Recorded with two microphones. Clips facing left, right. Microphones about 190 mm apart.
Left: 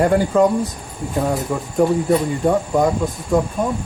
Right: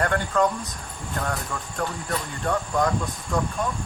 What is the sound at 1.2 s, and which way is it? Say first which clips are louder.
Speech: left 10 dB; 20° left (ahead or behind).